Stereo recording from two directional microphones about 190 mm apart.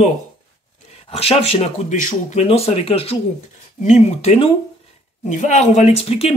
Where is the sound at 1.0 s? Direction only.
30° left (ahead or behind).